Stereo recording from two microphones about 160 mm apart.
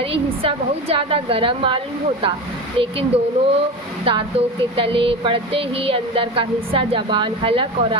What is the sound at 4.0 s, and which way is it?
A woman's voice, 35° right (ahead or behind).